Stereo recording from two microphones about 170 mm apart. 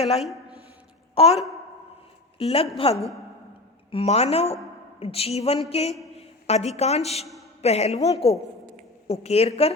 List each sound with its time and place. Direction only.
0.2 s a woman's voice: centre (ahead or behind)
1.1 s a woman's voice: 35° left (ahead or behind)
2.4 s a woman's voice: 35° left (ahead or behind)